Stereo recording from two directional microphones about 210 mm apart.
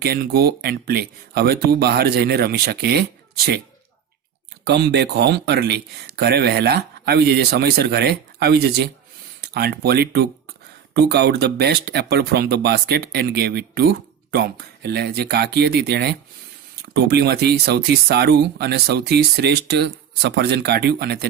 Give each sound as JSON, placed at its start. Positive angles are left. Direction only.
{"t": 0.0, "sound": "speech", "side_deg": -45}
{"t": 4.6, "sound": "speech", "side_deg": -50}